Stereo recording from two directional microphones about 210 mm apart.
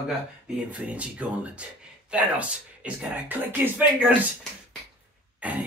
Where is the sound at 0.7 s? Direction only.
5° right (ahead or behind).